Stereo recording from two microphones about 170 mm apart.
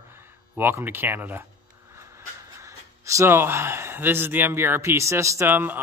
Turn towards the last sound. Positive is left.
turn(degrees=-10)  # may be behind; listen again after turning